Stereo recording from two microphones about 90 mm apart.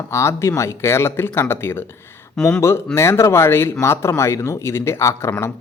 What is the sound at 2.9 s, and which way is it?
Speech, 30° left (ahead or behind).